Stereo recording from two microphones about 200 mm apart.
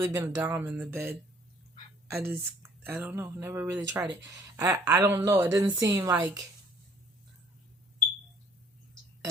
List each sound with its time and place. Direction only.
0.0 s speech: 10° right (ahead or behind)
2.1 s speech: 10° right (ahead or behind)